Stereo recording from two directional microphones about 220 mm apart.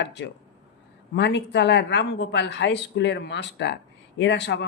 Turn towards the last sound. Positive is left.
turn(degrees=55)  # may be behind; listen again after turning